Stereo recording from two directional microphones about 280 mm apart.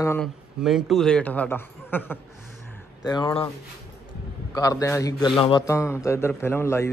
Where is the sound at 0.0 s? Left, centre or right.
Centre.